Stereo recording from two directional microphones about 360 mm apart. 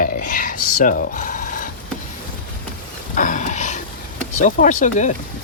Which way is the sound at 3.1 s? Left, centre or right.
Left.